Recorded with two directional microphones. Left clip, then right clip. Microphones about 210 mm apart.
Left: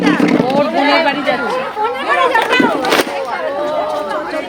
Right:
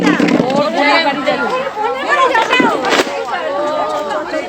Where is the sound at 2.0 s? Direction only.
5° left (ahead or behind).